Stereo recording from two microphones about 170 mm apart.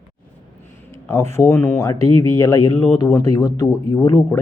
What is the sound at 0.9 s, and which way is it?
Speech, 15° left (ahead or behind).